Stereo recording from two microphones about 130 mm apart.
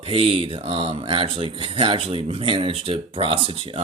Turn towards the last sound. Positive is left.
turn(degrees=-45)  # may be behind; listen again after turning